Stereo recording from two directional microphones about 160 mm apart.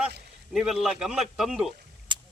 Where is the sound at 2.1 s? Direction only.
30° right (ahead or behind).